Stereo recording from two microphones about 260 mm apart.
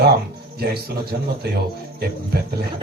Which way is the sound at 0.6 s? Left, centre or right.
Right.